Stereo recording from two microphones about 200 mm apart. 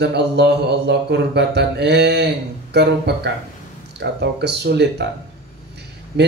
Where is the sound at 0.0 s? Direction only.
55° right (ahead or behind).